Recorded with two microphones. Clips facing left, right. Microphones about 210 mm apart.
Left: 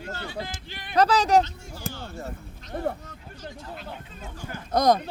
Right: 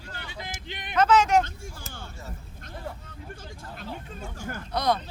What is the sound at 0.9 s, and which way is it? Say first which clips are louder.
Speech: left 1 dB; 35° left (ahead or behind).